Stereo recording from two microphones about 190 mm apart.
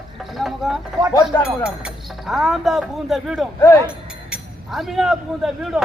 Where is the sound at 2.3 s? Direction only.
Centre (ahead or behind).